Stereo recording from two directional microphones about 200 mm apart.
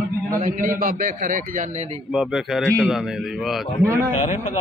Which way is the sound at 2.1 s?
5° right (ahead or behind).